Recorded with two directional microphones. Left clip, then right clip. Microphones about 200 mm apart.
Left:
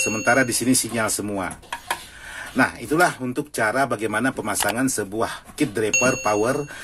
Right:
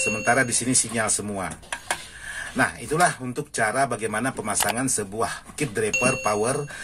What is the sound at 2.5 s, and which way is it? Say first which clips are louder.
Speech: left 3 dB; 35° left (ahead or behind).